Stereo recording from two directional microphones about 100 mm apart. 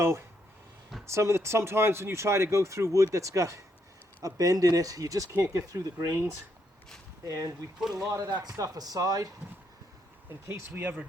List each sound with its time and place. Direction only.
1.0 s speech: 30° right (ahead or behind)
7.3 s speech: 35° right (ahead or behind)
7.8 s speech: 5° right (ahead or behind)
8.0 s speech: 35° right (ahead or behind)
10.5 s speech: 25° right (ahead or behind)